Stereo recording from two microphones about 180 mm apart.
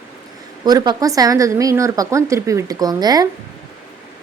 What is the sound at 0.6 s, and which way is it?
Speech, 20° right (ahead or behind).